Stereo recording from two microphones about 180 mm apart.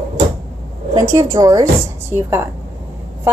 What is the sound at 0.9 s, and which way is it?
A woman's voice, 20° right (ahead or behind).